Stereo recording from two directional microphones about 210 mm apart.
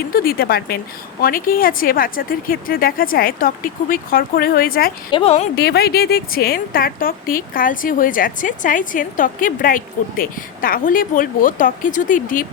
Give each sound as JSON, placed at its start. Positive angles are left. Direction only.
{"t": 0.1, "sound": "speech", "side_deg": 45}
{"t": 5.1, "sound": "a woman's voice", "side_deg": 30}
{"t": 5.5, "sound": "speech", "side_deg": 50}